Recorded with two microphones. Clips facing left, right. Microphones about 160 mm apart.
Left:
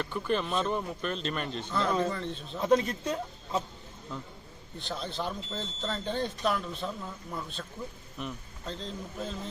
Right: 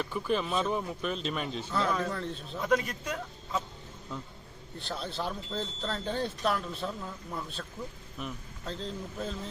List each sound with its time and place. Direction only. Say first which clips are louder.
0.0 s speech: even; 5° right (ahead or behind)
2.6 s speech: left 3 dB; 25° left (ahead or behind)
4.1 s speech: even; centre (ahead or behind)